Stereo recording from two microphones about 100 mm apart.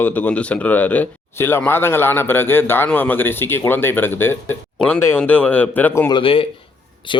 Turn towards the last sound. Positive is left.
turn(degrees=65)  # may be behind; listen again after turning